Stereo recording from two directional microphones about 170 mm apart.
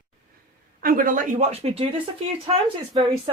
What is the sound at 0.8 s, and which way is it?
Speech, 55° right (ahead or behind).